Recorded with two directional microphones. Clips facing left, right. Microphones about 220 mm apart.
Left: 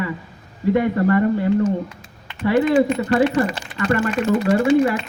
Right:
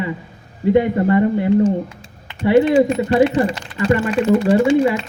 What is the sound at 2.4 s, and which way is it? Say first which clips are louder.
A man's voice: right 3 dB; 20° right (ahead or behind).